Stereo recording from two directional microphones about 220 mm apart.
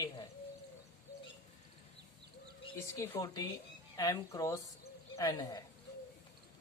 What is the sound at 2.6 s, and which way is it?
Speech, 15° left (ahead or behind).